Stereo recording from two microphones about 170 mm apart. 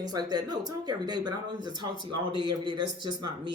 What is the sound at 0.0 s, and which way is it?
Speech, 25° right (ahead or behind).